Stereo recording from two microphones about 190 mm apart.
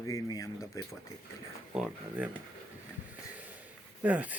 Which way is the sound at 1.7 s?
5° right (ahead or behind).